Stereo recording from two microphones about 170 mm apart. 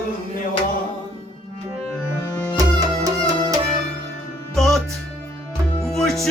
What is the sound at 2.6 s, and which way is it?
Music, 20° right (ahead or behind).